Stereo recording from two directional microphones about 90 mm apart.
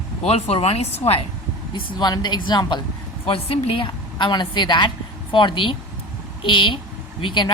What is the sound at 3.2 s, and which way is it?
A woman's voice, 90° left.